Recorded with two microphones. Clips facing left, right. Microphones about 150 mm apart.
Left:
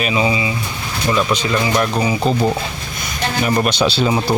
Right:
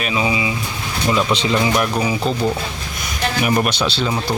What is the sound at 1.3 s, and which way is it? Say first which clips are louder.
Speech: even; 30° right (ahead or behind).